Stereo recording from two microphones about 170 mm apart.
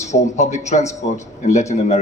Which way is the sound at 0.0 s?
45° left (ahead or behind).